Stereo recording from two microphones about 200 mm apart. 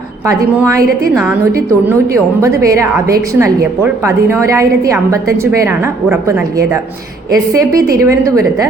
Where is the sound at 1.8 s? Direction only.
15° right (ahead or behind).